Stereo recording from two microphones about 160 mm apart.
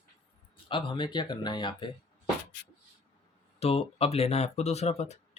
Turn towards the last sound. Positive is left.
turn(degrees=45)  # may be behind; listen again after turning